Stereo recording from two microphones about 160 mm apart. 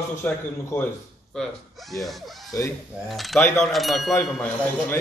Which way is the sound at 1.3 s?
Centre (ahead or behind).